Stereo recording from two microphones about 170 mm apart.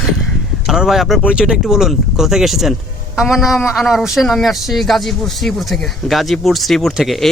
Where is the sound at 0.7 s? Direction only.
Centre (ahead or behind).